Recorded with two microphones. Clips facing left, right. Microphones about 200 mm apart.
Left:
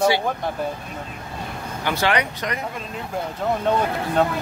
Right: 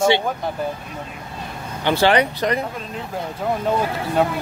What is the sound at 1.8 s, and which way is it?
Speech, 30° right (ahead or behind).